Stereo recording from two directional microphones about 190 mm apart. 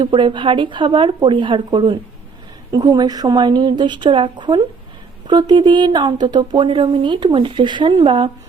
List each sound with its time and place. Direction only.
0.0 s speech: 25° right (ahead or behind)